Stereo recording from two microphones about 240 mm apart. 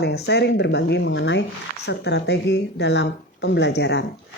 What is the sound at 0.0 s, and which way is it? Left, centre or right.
Speech, left.